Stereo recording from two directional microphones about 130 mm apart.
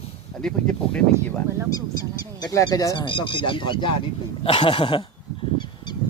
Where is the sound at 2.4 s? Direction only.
25° left (ahead or behind); by 5.0 s 40° left (ahead or behind).